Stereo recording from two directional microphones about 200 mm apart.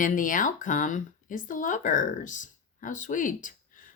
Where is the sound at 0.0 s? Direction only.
40° left (ahead or behind).